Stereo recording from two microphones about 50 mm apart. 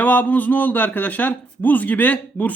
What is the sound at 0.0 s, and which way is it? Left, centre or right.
A man's voice, left.